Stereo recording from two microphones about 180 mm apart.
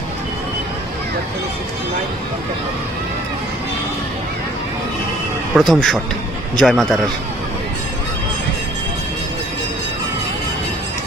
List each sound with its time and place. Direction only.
5.5 s speech: centre (ahead or behind)